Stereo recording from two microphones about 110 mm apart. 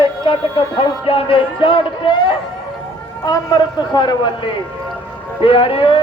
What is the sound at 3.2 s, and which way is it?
A man's voice, 35° left (ahead or behind).